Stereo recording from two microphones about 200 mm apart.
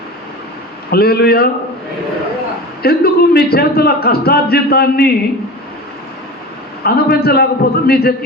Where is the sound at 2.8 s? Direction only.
50° left (ahead or behind).